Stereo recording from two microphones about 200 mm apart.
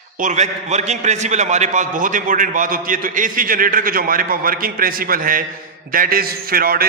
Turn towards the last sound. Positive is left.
turn(degrees=-45)  # may be behind; listen again after turning